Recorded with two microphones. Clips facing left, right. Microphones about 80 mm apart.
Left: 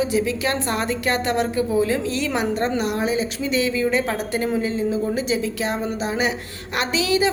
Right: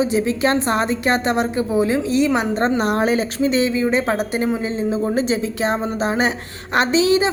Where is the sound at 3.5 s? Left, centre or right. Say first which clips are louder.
Right 1 dB; right.